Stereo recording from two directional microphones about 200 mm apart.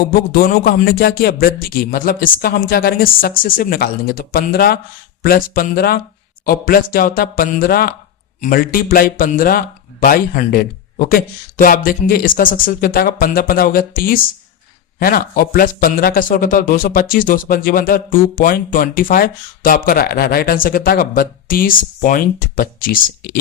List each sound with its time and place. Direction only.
0.1 s speech: 50° left (ahead or behind)